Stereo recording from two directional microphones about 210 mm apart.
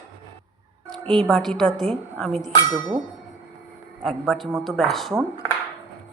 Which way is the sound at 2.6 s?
20° right (ahead or behind).